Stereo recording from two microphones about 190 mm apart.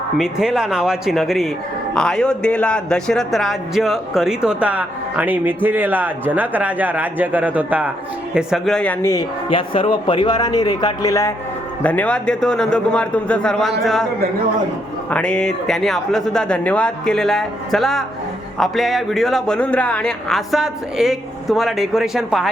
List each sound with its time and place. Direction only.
0.2 s a man's voice: 5° right (ahead or behind); by 9.2 s 15° left (ahead or behind)
9.5 s a man's voice: 25° left (ahead or behind); by 14.1 s centre (ahead or behind)
15.1 s speech: 5° left (ahead or behind)